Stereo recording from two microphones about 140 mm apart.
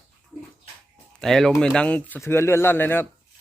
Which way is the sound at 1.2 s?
Centre (ahead or behind).